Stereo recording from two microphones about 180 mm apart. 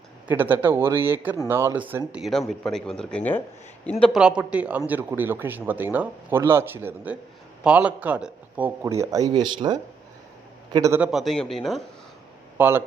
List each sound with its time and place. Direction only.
0.3 s speech: 10° right (ahead or behind)
2.5 s speech: 5° left (ahead or behind)
4.0 s a man's voice: 5° right (ahead or behind); by 11.0 s 20° right (ahead or behind)
11.0 s speech: centre (ahead or behind)
12.5 s speech: 10° right (ahead or behind)